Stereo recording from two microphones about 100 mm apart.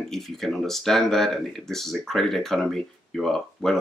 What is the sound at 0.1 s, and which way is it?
Speech, 5° left (ahead or behind).